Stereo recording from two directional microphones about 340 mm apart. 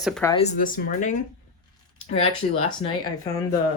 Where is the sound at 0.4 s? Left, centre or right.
Left.